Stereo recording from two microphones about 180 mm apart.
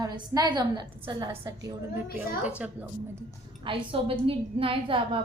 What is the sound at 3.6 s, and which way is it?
A woman's voice, 30° right (ahead or behind).